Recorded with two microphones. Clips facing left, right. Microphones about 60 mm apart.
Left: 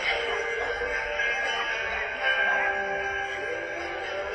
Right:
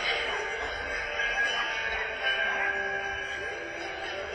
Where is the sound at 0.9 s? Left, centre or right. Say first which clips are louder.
Left 4 dB; left.